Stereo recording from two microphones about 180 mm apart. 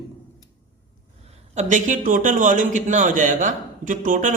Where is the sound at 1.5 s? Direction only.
40° right (ahead or behind).